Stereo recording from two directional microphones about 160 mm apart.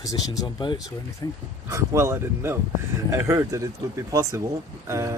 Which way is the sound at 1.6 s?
20° right (ahead or behind).